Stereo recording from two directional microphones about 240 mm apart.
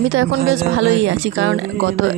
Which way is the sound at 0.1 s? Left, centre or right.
Right.